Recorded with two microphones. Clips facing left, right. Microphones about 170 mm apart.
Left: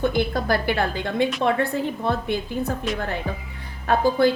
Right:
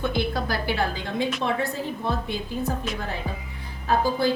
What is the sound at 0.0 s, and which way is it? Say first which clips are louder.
A woman's voice: left 4 dB; 50° left (ahead or behind).